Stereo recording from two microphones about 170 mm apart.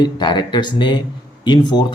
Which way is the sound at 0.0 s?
25° left (ahead or behind).